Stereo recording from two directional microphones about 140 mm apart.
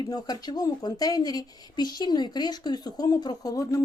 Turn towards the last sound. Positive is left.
turn(degrees=25)  # may be behind; listen again after turning